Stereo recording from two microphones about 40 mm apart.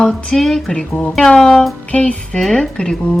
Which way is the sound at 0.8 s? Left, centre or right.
Left.